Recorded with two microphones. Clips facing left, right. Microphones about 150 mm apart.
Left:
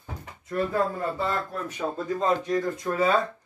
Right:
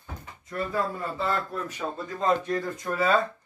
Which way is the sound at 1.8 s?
10° left (ahead or behind).